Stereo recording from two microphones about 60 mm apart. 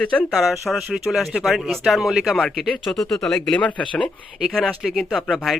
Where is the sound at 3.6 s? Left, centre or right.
Left.